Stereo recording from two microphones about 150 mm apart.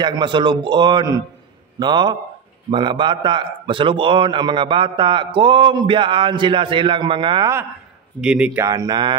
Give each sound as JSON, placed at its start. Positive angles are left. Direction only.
{"t": 0.0, "sound": "a man's voice", "side_deg": -30}
{"t": 8.2, "sound": "a man's voice", "side_deg": -5}
{"t": 8.5, "sound": "speech", "side_deg": -25}